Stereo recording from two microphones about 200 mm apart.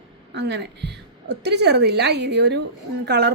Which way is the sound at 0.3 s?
60° right (ahead or behind).